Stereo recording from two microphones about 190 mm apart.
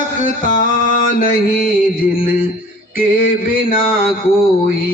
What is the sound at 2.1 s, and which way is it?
Mantra, 50° left (ahead or behind).